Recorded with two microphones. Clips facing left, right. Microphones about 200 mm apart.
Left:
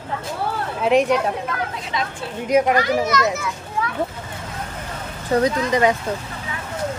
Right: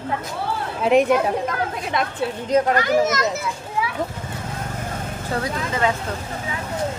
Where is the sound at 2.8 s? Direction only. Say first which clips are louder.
Right 1 dB; 45° right (ahead or behind).